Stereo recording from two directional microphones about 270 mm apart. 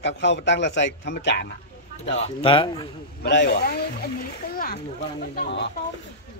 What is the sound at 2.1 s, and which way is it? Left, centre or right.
Speech, left.